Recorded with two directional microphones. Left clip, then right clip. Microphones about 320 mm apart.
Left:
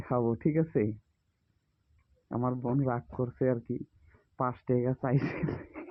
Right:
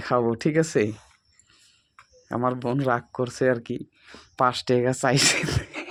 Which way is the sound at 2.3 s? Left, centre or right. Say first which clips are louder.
Right 7 dB; centre.